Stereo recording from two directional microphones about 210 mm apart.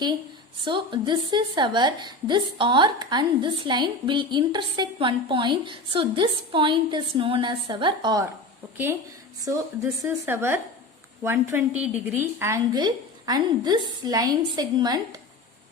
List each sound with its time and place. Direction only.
0.6 s a woman's voice: 20° right (ahead or behind)
9.4 s a woman's voice: 15° right (ahead or behind)